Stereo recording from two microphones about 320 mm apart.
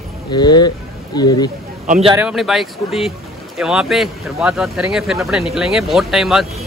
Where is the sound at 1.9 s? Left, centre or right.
Centre.